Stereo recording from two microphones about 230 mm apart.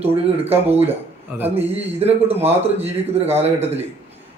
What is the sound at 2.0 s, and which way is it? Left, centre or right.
Speech, right.